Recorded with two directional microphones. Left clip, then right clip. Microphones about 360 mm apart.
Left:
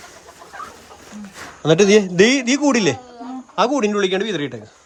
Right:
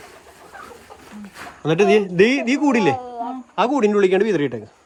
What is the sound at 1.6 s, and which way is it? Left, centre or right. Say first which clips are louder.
Speech: left 3 dB; centre.